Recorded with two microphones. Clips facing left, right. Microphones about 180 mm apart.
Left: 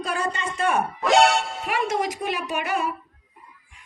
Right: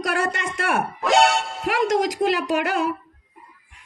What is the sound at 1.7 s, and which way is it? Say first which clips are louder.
A woman's voice: right 5 dB; 90° right.